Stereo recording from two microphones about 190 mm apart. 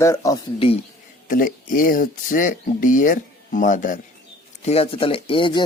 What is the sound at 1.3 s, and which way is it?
Speech, 45° left (ahead or behind).